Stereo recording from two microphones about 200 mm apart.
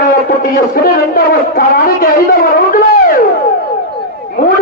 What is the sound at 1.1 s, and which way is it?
A man's voice, 45° left (ahead or behind).